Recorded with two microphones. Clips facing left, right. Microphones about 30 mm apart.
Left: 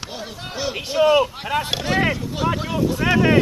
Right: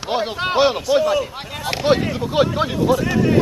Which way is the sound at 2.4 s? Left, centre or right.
Right.